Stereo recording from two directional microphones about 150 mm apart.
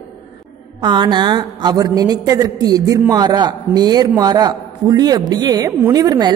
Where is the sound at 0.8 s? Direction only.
30° right (ahead or behind).